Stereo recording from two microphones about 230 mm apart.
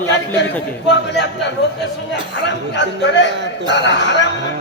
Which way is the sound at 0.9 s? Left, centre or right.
Left.